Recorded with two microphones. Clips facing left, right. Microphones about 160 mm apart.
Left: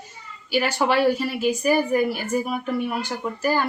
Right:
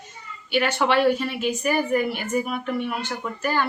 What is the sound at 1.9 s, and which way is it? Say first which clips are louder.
Speech: left 2 dB; 40° left (ahead or behind).